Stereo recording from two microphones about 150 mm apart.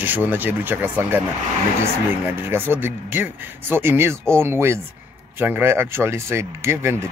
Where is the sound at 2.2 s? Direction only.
15° right (ahead or behind).